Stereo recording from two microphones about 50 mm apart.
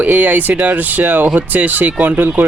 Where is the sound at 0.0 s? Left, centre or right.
Right.